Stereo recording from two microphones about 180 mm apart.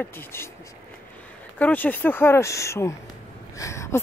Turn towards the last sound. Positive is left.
turn(degrees=15)  # may be behind; listen again after turning